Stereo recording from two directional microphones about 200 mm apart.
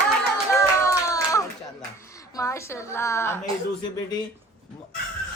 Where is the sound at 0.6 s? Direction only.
15° left (ahead or behind).